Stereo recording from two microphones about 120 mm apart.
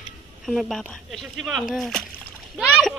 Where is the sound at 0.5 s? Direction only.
Centre (ahead or behind).